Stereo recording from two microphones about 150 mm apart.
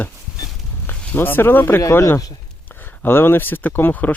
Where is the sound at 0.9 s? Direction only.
10° left (ahead or behind).